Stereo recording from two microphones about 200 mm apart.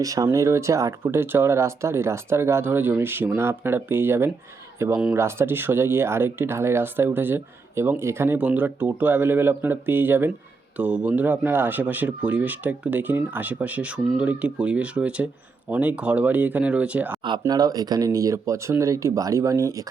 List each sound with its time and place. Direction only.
0.0 s speech: 15° right (ahead or behind)
17.2 s speech: 20° right (ahead or behind)